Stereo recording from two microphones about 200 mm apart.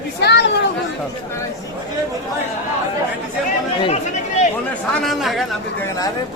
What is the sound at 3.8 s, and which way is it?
Chatter, 35° left (ahead or behind).